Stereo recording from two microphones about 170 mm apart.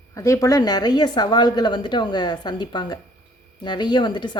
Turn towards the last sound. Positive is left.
turn(degrees=25)  # may be behind; listen again after turning